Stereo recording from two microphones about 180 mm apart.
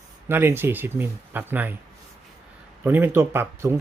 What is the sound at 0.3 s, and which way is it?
Speech, 10° right (ahead or behind).